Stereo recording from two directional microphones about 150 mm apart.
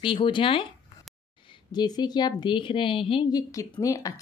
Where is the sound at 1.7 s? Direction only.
30° left (ahead or behind).